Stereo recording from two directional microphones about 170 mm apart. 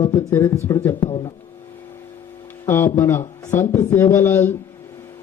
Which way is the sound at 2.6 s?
15° left (ahead or behind).